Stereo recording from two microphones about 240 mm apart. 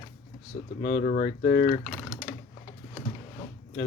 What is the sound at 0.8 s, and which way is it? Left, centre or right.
Speech, left.